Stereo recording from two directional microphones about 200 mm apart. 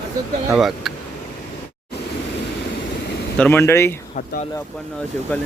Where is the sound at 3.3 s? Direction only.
10° left (ahead or behind).